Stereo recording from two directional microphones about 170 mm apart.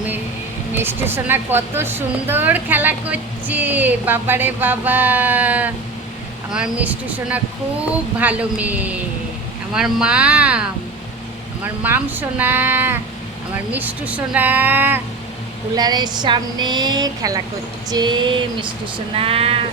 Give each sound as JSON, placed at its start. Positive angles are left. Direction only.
{"t": 0.8, "sound": "a woman's voice", "side_deg": -15}
{"t": 15.7, "sound": "a woman's voice", "side_deg": -25}